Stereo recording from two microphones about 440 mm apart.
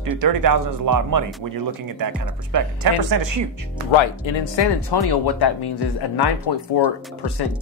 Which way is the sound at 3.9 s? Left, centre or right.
Left.